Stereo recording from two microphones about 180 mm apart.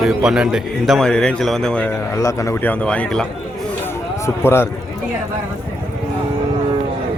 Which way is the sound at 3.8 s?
15° left (ahead or behind).